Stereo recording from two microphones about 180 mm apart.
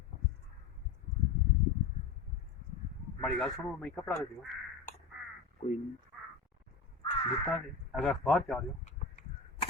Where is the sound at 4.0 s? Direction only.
15° left (ahead or behind).